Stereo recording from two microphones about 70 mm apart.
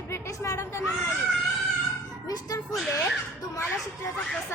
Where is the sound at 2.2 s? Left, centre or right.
Left.